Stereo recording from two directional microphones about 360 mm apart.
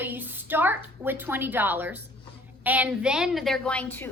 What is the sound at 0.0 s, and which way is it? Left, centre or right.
A woman's voice, centre.